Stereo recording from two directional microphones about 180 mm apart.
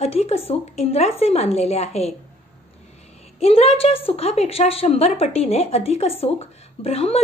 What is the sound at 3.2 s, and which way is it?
A woman's voice, 35° left (ahead or behind).